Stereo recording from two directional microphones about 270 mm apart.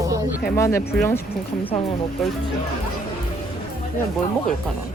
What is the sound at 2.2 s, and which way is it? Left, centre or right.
Speech, centre.